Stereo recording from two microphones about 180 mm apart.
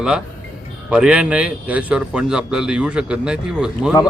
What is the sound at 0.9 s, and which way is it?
A man's voice, 5° right (ahead or behind).